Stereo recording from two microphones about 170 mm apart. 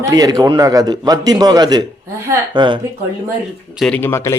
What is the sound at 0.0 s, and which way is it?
A man's voice, 20° right (ahead or behind).